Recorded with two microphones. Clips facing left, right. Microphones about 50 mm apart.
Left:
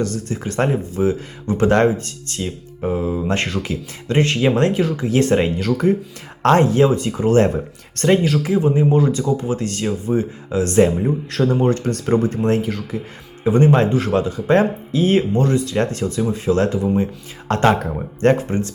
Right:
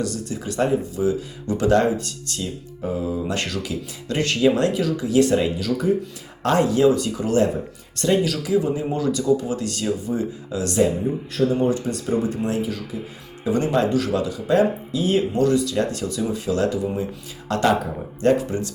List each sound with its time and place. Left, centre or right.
0.0 s speech: left
10.8 s a man's voice: left
13.4 s speech: left